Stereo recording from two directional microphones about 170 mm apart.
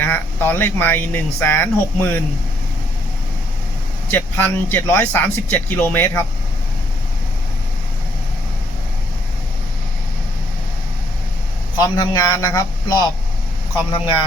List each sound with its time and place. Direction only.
0.0 s speech: 10° left (ahead or behind)
4.1 s speech: 15° left (ahead or behind)
11.8 s a man's voice: 20° left (ahead or behind)